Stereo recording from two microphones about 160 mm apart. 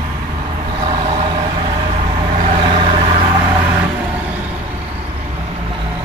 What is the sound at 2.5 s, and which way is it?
Vehicle, 35° right (ahead or behind).